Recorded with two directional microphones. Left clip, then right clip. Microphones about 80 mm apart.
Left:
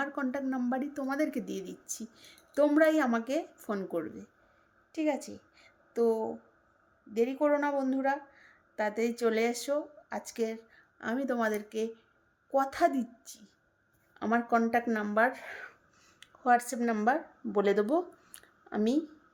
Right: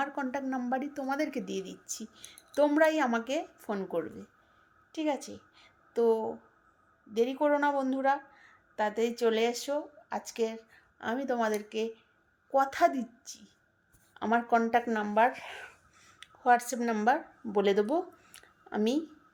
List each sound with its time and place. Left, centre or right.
0.0 s speech: left
4.0 s speech: left
4.9 s a sound: left
7.1 s a woman's voice: left